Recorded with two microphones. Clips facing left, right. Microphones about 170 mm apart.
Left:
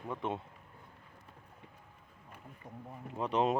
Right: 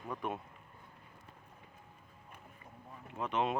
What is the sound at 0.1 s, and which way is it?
Speech, 25° left (ahead or behind).